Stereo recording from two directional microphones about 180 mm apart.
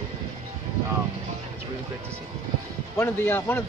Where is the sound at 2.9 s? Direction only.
10° left (ahead or behind).